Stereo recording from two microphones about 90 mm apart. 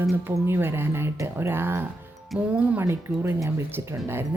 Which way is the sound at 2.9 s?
30° right (ahead or behind).